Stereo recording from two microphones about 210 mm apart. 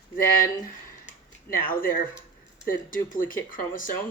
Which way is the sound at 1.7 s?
40° left (ahead or behind).